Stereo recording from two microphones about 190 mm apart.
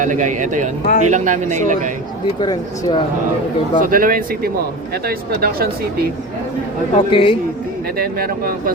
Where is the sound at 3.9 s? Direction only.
50° right (ahead or behind).